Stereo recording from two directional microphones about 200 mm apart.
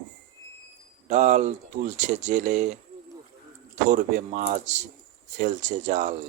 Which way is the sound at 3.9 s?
40° right (ahead or behind).